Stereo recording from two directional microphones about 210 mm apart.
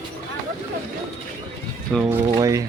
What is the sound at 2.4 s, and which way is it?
Speech, 15° right (ahead or behind).